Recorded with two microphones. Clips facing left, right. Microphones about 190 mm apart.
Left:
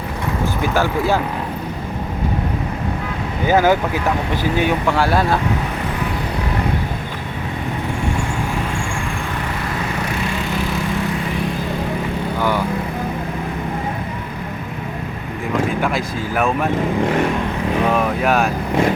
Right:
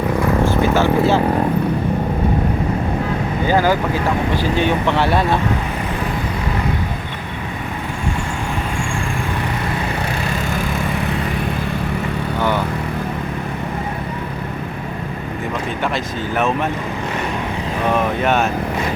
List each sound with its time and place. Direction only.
3.4 s speech: 15° left (ahead or behind)
16.3 s speech: 5° left (ahead or behind)
18.2 s speech: centre (ahead or behind)